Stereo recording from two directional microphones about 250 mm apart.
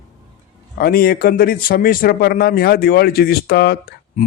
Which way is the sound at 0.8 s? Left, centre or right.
Left.